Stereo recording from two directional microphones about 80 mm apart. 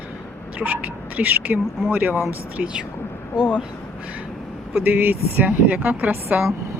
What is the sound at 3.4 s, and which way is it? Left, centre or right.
Speech, centre.